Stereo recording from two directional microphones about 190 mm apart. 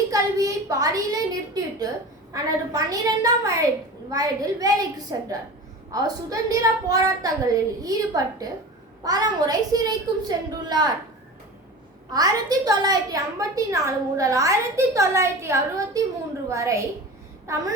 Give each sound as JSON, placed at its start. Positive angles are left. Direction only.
{"t": 0.1, "sound": "a sound", "side_deg": -15}
{"t": 2.3, "sound": "a woman's voice", "side_deg": -20}
{"t": 12.1, "sound": "a woman's voice", "side_deg": -20}